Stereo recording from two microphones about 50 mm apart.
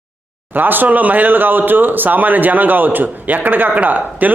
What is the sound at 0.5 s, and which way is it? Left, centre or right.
A man's voice, right.